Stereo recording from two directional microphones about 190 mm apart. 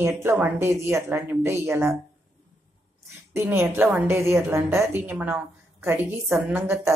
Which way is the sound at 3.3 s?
15° right (ahead or behind).